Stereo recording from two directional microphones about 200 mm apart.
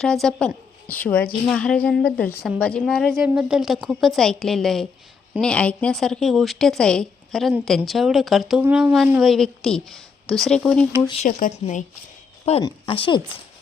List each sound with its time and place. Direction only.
0.0 s a woman's voice: 5° left (ahead or behind)
11.0 s speech: 25° left (ahead or behind)
11.3 s speech: 45° left (ahead or behind)
12.6 s speech: 25° left (ahead or behind)